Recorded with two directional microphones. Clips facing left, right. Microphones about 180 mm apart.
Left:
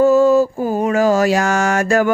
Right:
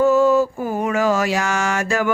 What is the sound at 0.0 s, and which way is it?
Mantra, 35° left (ahead or behind).